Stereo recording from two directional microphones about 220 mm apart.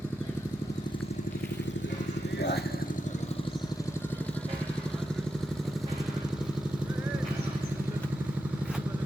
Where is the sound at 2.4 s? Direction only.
50° left (ahead or behind).